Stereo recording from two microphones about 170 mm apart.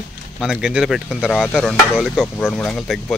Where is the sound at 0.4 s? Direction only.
5° right (ahead or behind).